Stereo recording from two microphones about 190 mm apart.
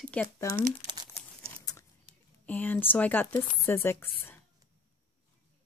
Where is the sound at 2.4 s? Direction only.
10° left (ahead or behind).